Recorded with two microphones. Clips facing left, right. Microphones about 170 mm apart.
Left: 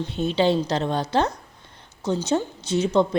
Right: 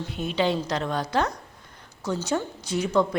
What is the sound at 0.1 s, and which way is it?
A woman's voice, 30° left (ahead or behind).